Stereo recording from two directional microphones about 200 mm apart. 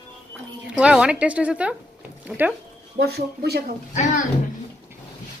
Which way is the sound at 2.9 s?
55° right (ahead or behind).